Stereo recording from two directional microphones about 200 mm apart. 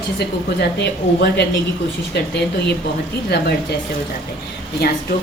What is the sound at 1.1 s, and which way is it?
A woman's voice, 60° left (ahead or behind).